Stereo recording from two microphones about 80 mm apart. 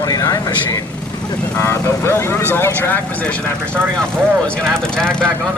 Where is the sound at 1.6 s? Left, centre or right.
Left; by 5.2 s centre.